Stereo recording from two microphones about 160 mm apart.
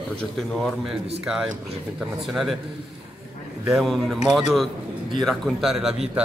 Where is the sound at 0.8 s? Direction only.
5° right (ahead or behind).